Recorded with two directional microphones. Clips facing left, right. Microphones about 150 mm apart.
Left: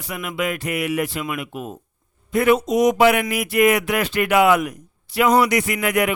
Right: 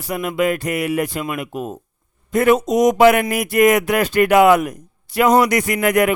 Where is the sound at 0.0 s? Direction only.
40° right (ahead or behind).